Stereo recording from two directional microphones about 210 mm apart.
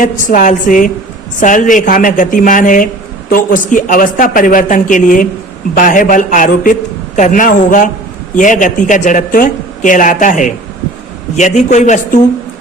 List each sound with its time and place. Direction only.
0.0 s a woman's voice: 40° left (ahead or behind)